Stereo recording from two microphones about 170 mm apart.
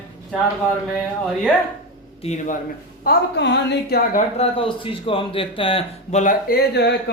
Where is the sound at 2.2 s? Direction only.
40° left (ahead or behind).